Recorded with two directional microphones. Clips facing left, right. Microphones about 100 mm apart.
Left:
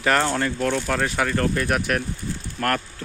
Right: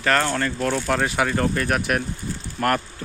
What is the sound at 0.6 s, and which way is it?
Speech, 5° right (ahead or behind).